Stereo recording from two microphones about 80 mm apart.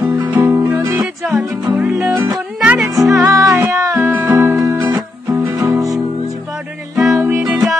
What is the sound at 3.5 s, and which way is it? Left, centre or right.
Music, right.